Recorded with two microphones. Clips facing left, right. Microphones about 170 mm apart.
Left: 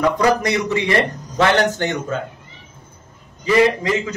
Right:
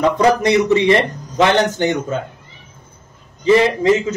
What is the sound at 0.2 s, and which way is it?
Speech, 25° right (ahead or behind).